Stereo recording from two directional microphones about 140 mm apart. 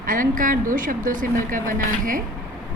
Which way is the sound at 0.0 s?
75° right (ahead or behind).